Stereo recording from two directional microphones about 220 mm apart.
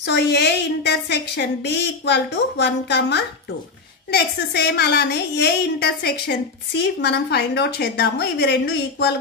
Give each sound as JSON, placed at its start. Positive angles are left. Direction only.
{"t": 0.0, "sound": "a woman's voice", "side_deg": 50}